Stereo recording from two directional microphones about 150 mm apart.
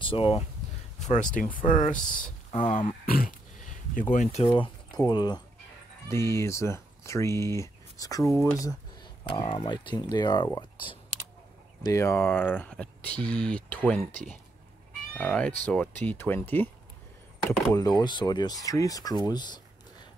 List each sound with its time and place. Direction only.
0.0 s speech: 35° left (ahead or behind)
0.9 s speech: 55° left (ahead or behind)
4.6 s speech: 30° left (ahead or behind)
6.0 s speech: 20° left (ahead or behind)
9.3 s speech: 35° left (ahead or behind)
11.8 s speech: 20° left (ahead or behind)
15.1 s speech: 10° left (ahead or behind)
17.5 s speech: 25° left (ahead or behind)